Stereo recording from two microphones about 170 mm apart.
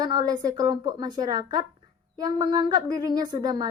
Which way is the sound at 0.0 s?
25° right (ahead or behind).